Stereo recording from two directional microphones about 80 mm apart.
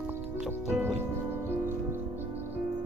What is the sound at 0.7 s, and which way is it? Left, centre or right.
Music, centre.